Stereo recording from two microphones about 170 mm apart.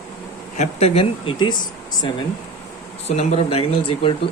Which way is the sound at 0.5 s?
40° left (ahead or behind).